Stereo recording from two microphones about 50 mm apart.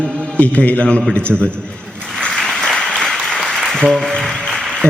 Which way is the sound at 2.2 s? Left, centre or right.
Centre.